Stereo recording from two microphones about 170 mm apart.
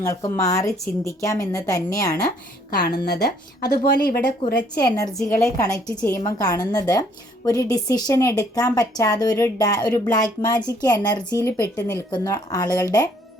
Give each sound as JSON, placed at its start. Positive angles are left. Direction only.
{"t": 0.0, "sound": "a woman's voice", "side_deg": 20}
{"t": 2.6, "sound": "a woman's voice", "side_deg": 75}
{"t": 4.8, "sound": "a woman's voice", "side_deg": 20}